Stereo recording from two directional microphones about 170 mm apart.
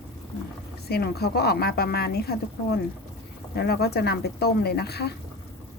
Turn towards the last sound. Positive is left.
turn(degrees=70)  # may be behind; listen again after turning